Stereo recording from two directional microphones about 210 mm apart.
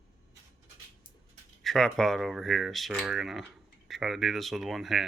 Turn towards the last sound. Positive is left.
turn(degrees=0)  # may be behind; listen again after turning